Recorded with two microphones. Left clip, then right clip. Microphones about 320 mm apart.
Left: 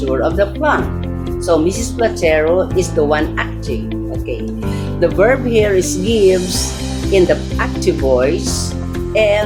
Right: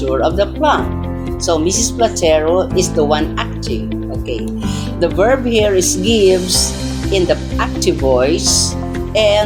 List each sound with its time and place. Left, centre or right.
0.1 s speech: centre
4.9 s speech: centre